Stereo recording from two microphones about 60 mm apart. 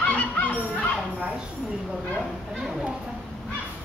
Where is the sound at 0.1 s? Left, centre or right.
Left.